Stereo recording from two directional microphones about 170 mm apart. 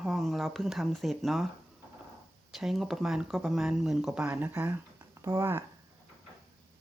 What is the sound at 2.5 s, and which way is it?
Speech, centre (ahead or behind).